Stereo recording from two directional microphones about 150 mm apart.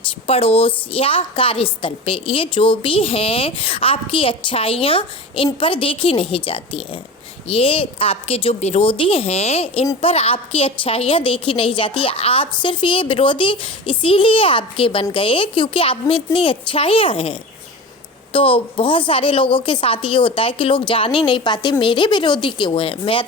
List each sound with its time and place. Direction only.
0.3 s a woman's voice: 40° left (ahead or behind)
18.3 s a woman's voice: 35° left (ahead or behind)